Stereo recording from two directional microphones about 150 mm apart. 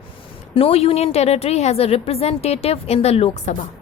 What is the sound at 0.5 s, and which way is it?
A woman's voice, 40° left (ahead or behind).